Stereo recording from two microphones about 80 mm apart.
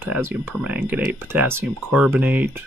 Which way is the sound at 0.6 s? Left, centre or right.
Right.